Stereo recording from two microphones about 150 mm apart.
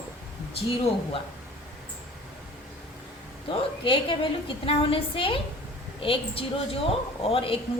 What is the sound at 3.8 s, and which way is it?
A woman's voice, 35° left (ahead or behind).